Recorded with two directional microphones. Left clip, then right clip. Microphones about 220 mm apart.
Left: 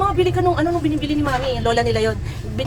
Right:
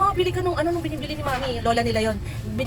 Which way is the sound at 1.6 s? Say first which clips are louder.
Left 2 dB; 10° left (ahead or behind).